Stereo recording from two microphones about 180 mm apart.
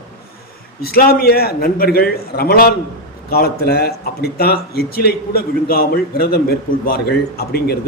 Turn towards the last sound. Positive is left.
turn(degrees=60)  # may be behind; listen again after turning